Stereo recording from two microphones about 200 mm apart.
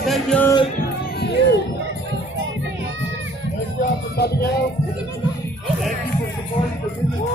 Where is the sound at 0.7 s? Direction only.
60° left (ahead or behind).